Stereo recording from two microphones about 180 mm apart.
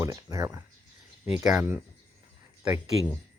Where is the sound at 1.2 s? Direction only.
5° right (ahead or behind).